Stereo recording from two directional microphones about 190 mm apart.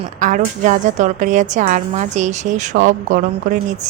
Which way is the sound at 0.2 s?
40° right (ahead or behind).